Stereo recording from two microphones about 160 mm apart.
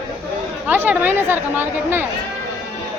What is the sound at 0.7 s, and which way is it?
A woman's voice, 10° right (ahead or behind).